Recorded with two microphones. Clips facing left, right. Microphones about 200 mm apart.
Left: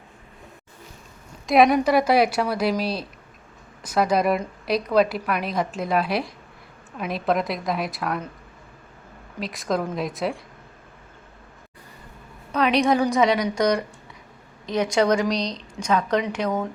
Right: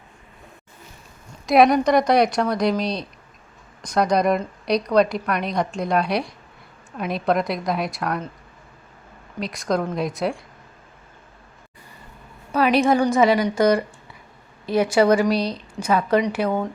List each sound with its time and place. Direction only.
1.5 s a woman's voice: centre (ahead or behind)
9.4 s a woman's voice: centre (ahead or behind)
12.5 s a woman's voice: 5° right (ahead or behind)